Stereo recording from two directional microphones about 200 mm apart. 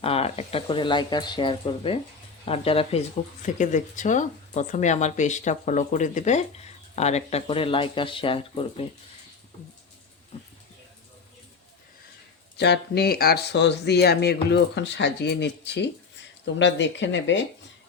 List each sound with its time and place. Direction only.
0.0 s speech: 30° left (ahead or behind)
12.5 s speech: 60° left (ahead or behind)